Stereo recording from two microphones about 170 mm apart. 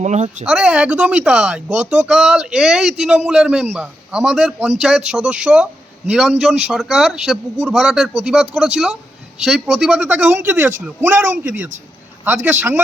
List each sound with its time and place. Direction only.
0.0 s speech: 45° right (ahead or behind)
0.4 s a man's voice: 5° right (ahead or behind)
12.5 s a man's voice: 10° right (ahead or behind)